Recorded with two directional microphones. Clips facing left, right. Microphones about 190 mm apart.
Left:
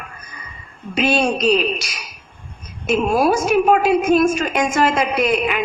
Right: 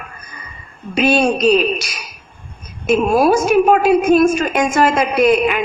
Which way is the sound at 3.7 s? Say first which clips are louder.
Right 2 dB; 45° right (ahead or behind).